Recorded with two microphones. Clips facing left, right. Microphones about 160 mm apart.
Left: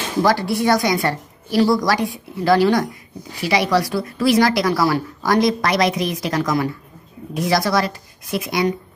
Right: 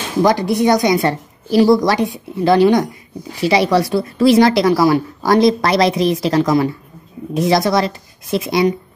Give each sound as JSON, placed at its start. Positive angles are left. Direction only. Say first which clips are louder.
{"t": 0.2, "sound": "a woman's voice", "louder": "right 4 dB", "side_deg": -20}